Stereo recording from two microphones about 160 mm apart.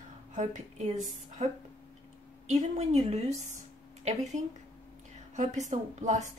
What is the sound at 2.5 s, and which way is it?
A woman's voice, 45° right (ahead or behind).